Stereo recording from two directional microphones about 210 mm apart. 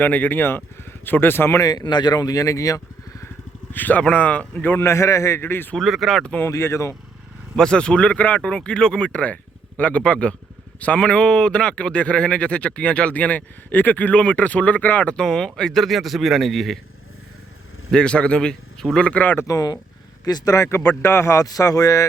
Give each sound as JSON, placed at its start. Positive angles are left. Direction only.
{"t": 0.0, "sound": "a man's voice", "side_deg": 10}
{"t": 17.9, "sound": "a man's voice", "side_deg": 5}